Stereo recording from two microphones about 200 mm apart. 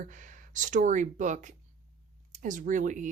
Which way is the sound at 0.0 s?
40° right (ahead or behind).